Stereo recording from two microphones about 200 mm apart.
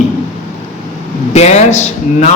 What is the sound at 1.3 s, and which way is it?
Speech, 35° left (ahead or behind).